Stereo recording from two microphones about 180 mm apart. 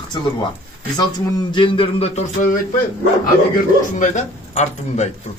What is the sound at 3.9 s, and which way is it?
Speech, 40° left (ahead or behind).